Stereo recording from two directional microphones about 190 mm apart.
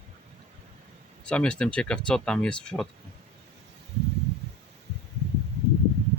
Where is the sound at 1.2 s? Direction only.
5° left (ahead or behind).